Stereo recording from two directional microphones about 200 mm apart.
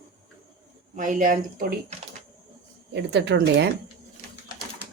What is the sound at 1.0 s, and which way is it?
Speech, 40° right (ahead or behind).